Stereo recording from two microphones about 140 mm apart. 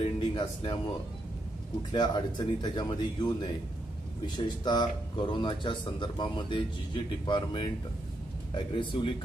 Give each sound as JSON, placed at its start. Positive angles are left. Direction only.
{"t": 0.0, "sound": "a sound", "side_deg": 40}
{"t": 1.9, "sound": "speech", "side_deg": 30}
{"t": 4.6, "sound": "speech", "side_deg": 35}